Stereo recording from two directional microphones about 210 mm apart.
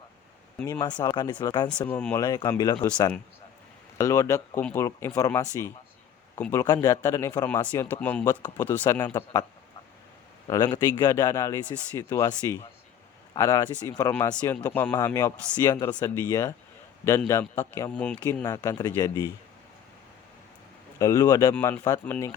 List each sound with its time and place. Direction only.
0.6 s speech: 20° left (ahead or behind)
1.8 s speech: 5° left (ahead or behind)
2.2 s speech: 20° left (ahead or behind)
3.9 s speech: 15° left (ahead or behind)
10.4 s speech: 20° left (ahead or behind)
18.4 s speech: 15° left (ahead or behind)
21.0 s speech: 15° left (ahead or behind)